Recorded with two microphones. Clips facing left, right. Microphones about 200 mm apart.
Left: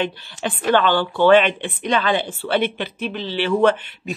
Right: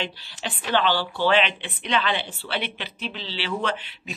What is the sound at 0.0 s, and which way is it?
Speech, 50° left (ahead or behind).